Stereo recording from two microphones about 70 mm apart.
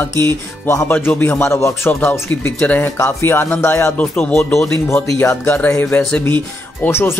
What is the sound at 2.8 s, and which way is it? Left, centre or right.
Speech, left.